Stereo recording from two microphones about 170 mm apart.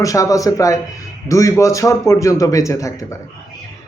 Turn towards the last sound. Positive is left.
turn(degrees=20)  # may be behind; listen again after turning